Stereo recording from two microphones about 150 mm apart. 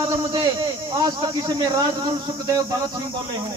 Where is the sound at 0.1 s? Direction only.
30° right (ahead or behind).